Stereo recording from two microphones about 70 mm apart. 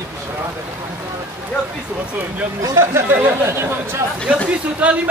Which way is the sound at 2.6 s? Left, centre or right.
Right.